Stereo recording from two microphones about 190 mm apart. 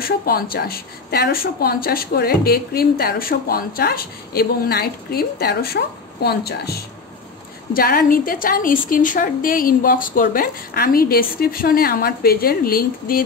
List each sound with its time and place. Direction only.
0.0 s a woman's voice: 55° left (ahead or behind)